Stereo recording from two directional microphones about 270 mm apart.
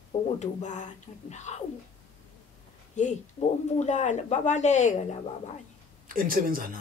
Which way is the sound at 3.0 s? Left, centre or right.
Left.